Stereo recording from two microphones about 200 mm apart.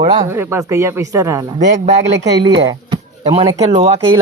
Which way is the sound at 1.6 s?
35° right (ahead or behind).